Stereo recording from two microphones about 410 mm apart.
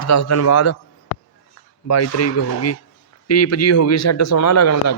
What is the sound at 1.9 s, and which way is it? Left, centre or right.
A man's voice, left.